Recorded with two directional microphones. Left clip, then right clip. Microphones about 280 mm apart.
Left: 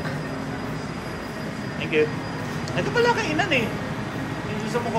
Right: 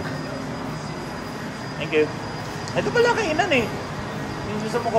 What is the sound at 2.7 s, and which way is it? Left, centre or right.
Speech, right.